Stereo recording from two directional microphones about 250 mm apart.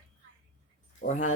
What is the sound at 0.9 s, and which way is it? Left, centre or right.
Speech, left.